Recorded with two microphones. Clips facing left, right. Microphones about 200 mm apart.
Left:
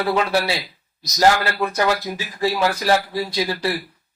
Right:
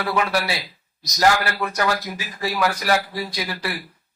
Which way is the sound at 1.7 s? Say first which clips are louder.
Left 3 dB; 25° left (ahead or behind).